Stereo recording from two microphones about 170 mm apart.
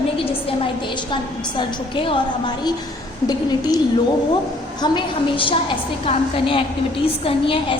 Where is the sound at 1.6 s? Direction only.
30° left (ahead or behind).